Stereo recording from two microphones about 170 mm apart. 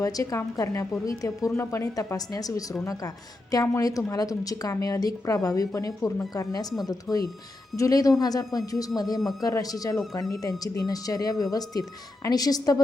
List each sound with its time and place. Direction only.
0.0 s a woman's voice: 20° left (ahead or behind)